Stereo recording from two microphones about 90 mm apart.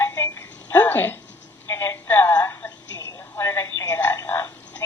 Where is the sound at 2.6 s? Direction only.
40° left (ahead or behind).